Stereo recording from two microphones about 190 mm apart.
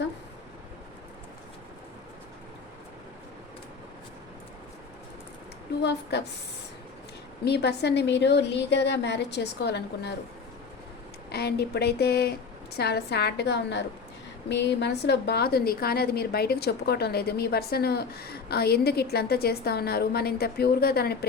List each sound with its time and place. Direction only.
5.8 s a woman's voice: 60° left (ahead or behind)
7.4 s a woman's voice: 60° left (ahead or behind)
11.3 s a woman's voice: 60° left (ahead or behind)